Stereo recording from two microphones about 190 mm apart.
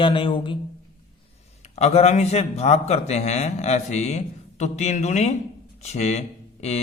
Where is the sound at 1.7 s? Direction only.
35° left (ahead or behind).